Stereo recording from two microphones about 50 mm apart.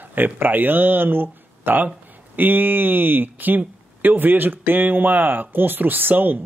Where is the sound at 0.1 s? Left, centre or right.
Right.